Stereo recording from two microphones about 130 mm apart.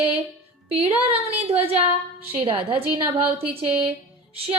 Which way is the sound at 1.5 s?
50° right (ahead or behind).